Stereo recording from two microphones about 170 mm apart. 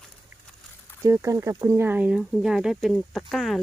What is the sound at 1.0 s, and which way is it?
Speech, 15° right (ahead or behind).